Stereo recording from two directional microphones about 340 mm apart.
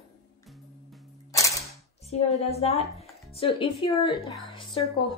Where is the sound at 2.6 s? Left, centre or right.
Centre.